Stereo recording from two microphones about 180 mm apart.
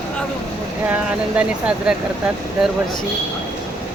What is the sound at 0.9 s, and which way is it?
Speech, 5° right (ahead or behind).